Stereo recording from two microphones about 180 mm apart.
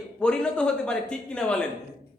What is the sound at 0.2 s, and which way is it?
A man's voice, 5° left (ahead or behind).